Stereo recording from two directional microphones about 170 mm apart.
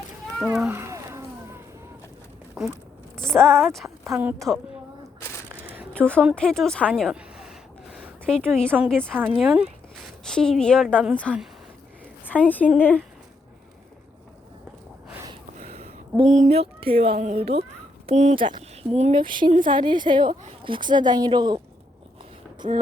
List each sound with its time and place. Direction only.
0.3 s speech: 5° right (ahead or behind)
0.8 s a sound: 15° right (ahead or behind)
2.6 s a woman's voice: centre (ahead or behind)
4.1 s speech: 10° right (ahead or behind)
4.4 s a woman's voice: centre (ahead or behind)
5.5 s a sound: 10° right (ahead or behind)
5.9 s a woman's voice: 5° left (ahead or behind)
9.0 s a woman's voice: 10° right (ahead or behind); by 11.4 s 5° left (ahead or behind)
12.5 s speech: 10° left (ahead or behind)
15.5 s a sound: 40° right (ahead or behind)
17.2 s speech: 40° right (ahead or behind)
18.3 s a woman's voice: 30° right (ahead or behind)
22.6 s speech: 40° right (ahead or behind)